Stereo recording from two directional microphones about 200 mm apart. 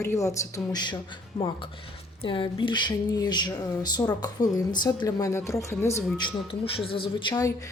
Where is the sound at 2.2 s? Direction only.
25° left (ahead or behind).